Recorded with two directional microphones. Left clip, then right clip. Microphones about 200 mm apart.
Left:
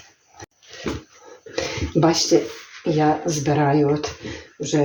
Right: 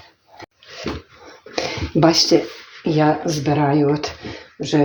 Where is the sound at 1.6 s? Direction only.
40° right (ahead or behind).